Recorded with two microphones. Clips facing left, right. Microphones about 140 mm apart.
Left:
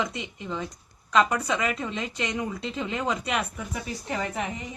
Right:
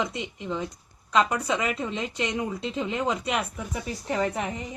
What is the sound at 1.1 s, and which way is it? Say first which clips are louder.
Speech: even; 20° right (ahead or behind).